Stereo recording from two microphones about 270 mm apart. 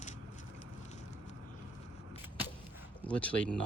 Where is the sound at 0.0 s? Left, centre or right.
Left.